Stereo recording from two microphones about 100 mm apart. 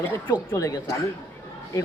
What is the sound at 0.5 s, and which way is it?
Speech, 35° left (ahead or behind).